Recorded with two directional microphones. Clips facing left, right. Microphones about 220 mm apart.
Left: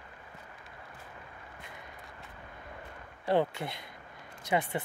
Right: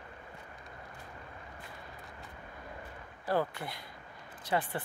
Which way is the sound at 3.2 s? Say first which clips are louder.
Left 4 dB; 25° left (ahead or behind).